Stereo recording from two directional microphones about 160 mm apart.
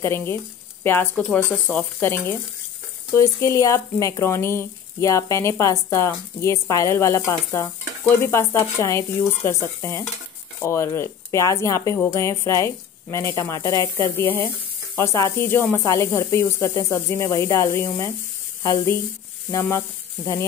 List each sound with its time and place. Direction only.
0.0 s speech: 15° left (ahead or behind)